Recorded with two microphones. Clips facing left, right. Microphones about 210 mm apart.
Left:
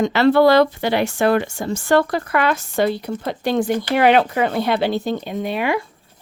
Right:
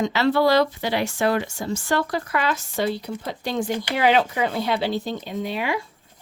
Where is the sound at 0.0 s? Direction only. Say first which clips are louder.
Left 6 dB; 55° left (ahead or behind).